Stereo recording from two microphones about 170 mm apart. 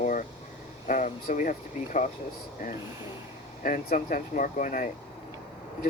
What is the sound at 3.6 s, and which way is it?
Speech, 50° left (ahead or behind).